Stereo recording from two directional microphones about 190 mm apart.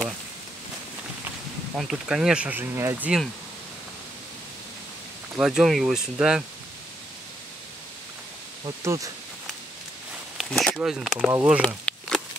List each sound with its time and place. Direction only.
1.8 s speech: centre (ahead or behind)
5.3 s speech: centre (ahead or behind)
8.6 s speech: 15° right (ahead or behind)
10.3 s a sound: 5° left (ahead or behind)
10.8 s speech: centre (ahead or behind)
11.6 s a sound: 5° left (ahead or behind)